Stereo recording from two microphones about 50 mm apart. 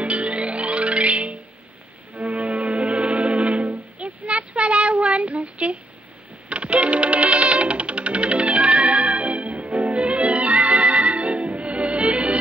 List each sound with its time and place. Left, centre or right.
0.0 s music: right